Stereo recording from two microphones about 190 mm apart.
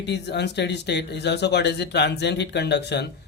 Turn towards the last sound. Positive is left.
turn(degrees=65)  # may be behind; listen again after turning